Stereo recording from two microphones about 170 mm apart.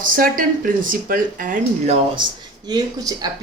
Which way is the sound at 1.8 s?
35° right (ahead or behind).